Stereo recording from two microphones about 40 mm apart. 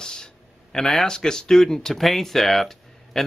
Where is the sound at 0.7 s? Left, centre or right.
Centre.